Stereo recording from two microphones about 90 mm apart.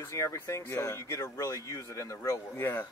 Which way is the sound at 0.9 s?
35° left (ahead or behind).